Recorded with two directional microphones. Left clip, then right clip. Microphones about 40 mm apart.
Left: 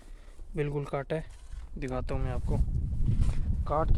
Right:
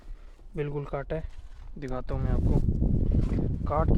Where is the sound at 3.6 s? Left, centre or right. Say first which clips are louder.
Right 1 dB; centre.